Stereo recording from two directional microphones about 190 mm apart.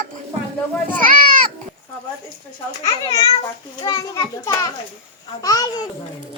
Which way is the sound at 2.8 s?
20° left (ahead or behind).